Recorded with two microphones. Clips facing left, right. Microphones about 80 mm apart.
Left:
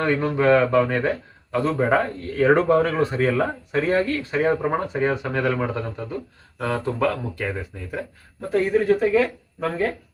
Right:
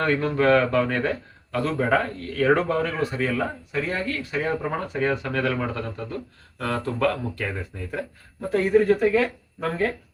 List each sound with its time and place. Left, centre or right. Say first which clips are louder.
0.0 s speech: left 1 dB; centre
3.0 s speech: left 4 dB; left
4.5 s speech: left 4 dB; centre
8.4 s speech: right 1 dB; centre